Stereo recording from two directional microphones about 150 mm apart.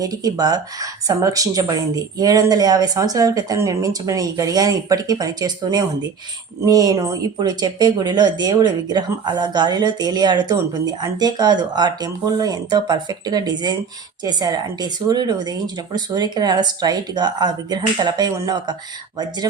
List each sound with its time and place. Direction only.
0.0 s speech: 25° right (ahead or behind)